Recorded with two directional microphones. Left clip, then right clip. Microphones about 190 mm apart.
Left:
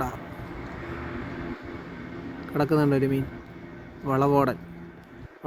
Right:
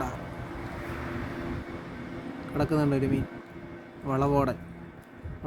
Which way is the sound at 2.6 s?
20° left (ahead or behind).